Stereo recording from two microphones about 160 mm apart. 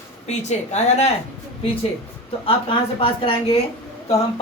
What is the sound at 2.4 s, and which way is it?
A woman's voice, 30° left (ahead or behind).